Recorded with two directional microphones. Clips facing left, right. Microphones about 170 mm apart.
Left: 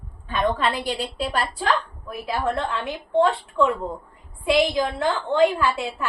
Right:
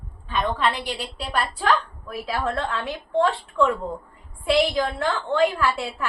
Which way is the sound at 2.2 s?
20° left (ahead or behind).